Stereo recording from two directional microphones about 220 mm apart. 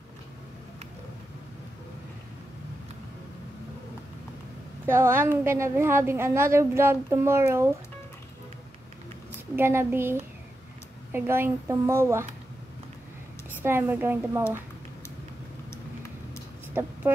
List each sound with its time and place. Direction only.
4.8 s a woman's voice: 10° right (ahead or behind)
9.6 s a woman's voice: 10° right (ahead or behind)
13.7 s a woman's voice: 10° right (ahead or behind)
16.8 s a woman's voice: 10° right (ahead or behind)